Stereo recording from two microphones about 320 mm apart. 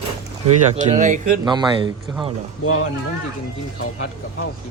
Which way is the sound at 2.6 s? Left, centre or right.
Left.